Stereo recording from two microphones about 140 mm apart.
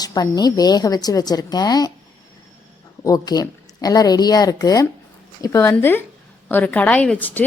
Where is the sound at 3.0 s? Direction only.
25° left (ahead or behind).